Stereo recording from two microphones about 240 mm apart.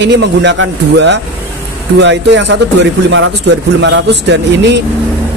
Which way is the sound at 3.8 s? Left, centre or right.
Right.